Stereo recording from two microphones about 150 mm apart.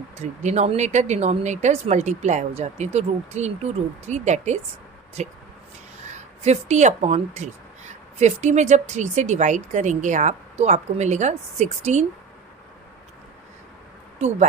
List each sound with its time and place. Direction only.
0.2 s speech: 50° right (ahead or behind)
14.2 s speech: 50° right (ahead or behind)